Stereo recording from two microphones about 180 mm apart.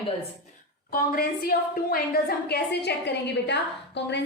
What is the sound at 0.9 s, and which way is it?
A woman's voice, 55° left (ahead or behind).